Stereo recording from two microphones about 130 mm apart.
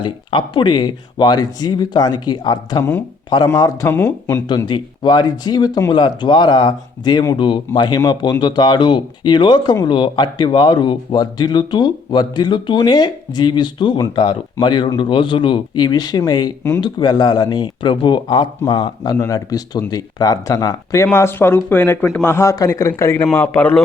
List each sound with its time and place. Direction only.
0.0 s speech: 40° left (ahead or behind); by 4.4 s 15° left (ahead or behind)
4.4 s speech: 35° left (ahead or behind); by 23.8 s 10° left (ahead or behind)